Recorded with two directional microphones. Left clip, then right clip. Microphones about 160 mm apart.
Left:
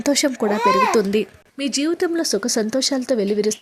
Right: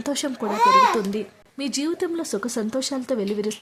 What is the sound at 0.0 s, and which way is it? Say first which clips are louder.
Speech: left 7 dB; 20° left (ahead or behind).